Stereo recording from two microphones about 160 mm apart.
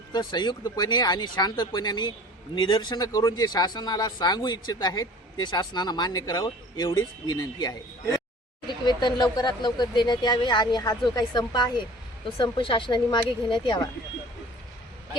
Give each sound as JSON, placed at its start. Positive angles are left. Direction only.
{"t": 0.1, "sound": "speech", "side_deg": 25}